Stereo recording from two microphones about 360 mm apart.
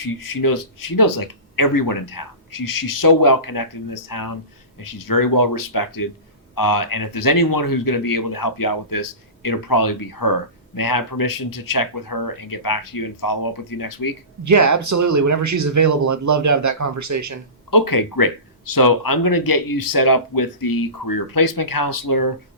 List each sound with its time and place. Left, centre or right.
0.0 s speech: left
14.4 s speech: right
17.7 s speech: left